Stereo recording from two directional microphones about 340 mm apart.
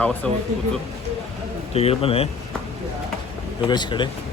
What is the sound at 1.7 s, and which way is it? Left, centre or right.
Speech, centre.